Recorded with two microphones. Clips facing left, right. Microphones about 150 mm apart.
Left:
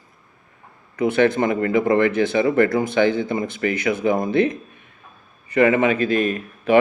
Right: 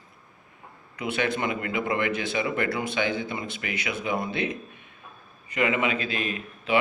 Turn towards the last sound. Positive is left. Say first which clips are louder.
# left 8 dB
turn(degrees=45)  # may be behind; listen again after turning